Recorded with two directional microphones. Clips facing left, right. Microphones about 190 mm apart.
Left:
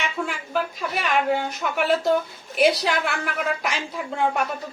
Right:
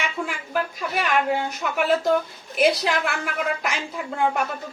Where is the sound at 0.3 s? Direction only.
5° right (ahead or behind).